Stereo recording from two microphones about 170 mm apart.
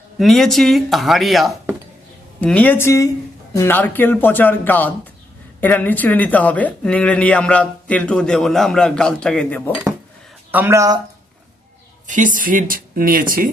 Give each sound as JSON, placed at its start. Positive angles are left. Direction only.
{"t": 0.2, "sound": "speech", "side_deg": 0}
{"t": 10.5, "sound": "speech", "side_deg": -15}
{"t": 12.0, "sound": "speech", "side_deg": -50}